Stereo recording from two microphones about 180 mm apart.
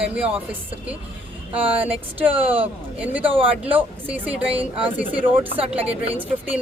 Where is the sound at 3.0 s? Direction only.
10° right (ahead or behind).